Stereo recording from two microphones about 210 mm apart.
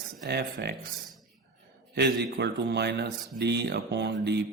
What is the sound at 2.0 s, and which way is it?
Speech, 55° right (ahead or behind).